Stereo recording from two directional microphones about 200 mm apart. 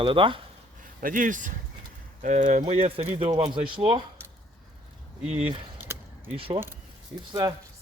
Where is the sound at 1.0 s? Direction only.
40° right (ahead or behind); by 4.0 s 25° right (ahead or behind).